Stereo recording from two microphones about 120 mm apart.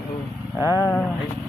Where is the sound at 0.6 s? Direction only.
25° left (ahead or behind).